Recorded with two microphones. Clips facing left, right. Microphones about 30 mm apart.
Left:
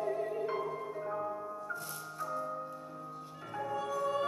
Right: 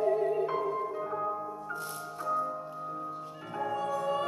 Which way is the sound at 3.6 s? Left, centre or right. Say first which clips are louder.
Right 3 dB; centre.